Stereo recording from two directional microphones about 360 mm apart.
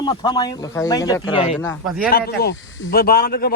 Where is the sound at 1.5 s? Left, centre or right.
Centre.